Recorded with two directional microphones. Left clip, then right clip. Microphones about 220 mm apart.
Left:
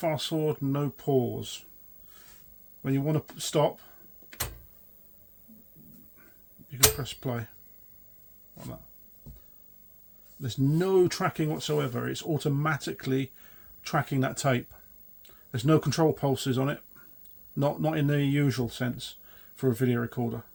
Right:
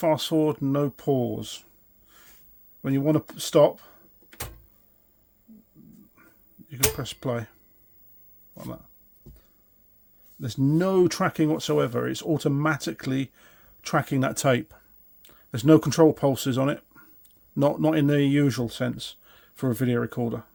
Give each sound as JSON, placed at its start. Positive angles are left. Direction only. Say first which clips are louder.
{"t": 0.0, "sound": "speech", "louder": "right 6 dB", "side_deg": -50}
{"t": 2.8, "sound": "speech", "louder": "right 6 dB", "side_deg": -55}
{"t": 6.9, "sound": "speech", "louder": "right 5 dB", "side_deg": -50}
{"t": 10.4, "sound": "speech", "louder": "right 4 dB", "side_deg": -55}